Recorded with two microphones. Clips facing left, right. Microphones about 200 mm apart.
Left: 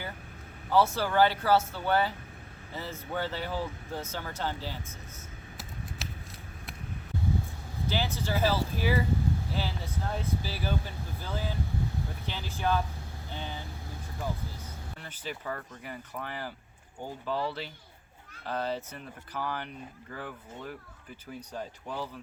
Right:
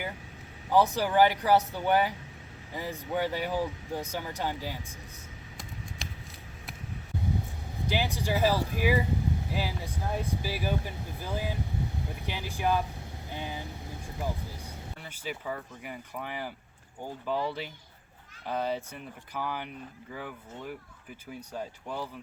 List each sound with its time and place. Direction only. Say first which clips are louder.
0.7 s speech: right 1 dB; 15° right (ahead or behind)
6.0 s shuffling cards: left 1 dB; centre (ahead or behind)
7.9 s speech: right 2 dB; 15° right (ahead or behind)
21.8 s speech: left 1 dB; 15° right (ahead or behind)